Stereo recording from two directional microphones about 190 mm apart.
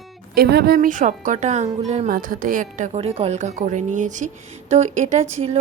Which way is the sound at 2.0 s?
50° right (ahead or behind).